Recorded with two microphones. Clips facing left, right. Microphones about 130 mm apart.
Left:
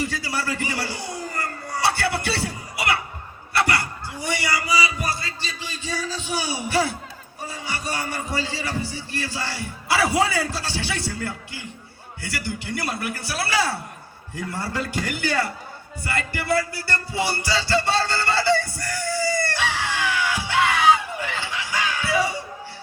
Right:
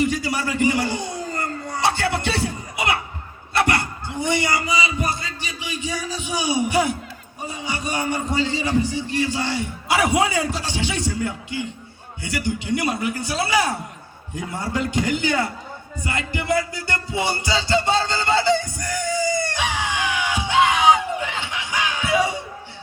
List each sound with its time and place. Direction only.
0.0 s a sound: 20° right (ahead or behind)
3.5 s a man's voice: 20° right (ahead or behind)
16.0 s music: 20° right (ahead or behind)